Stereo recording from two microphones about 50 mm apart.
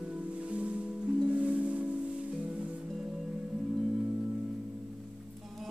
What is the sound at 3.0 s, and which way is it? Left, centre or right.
Music, centre.